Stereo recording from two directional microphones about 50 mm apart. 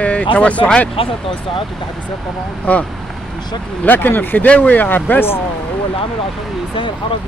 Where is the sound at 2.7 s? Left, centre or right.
Left.